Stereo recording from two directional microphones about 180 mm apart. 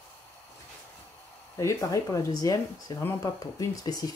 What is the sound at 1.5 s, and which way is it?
Speech, 20° left (ahead or behind).